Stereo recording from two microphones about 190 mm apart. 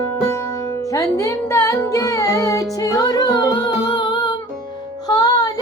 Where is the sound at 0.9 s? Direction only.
15° left (ahead or behind).